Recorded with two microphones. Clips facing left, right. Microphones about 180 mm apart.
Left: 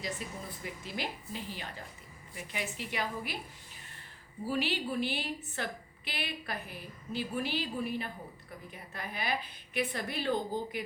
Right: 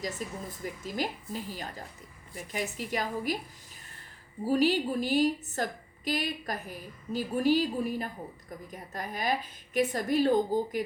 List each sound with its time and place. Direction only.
0.0 s a woman's voice: 40° right (ahead or behind)
4.4 s a woman's voice: 40° right (ahead or behind)